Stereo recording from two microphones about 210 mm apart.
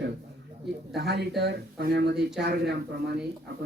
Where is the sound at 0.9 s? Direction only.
50° right (ahead or behind).